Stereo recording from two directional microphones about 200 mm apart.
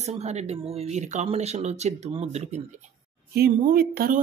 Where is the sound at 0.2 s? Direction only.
35° right (ahead or behind).